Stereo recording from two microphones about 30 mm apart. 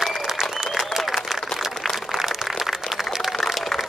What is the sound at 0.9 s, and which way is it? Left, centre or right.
Applause, centre.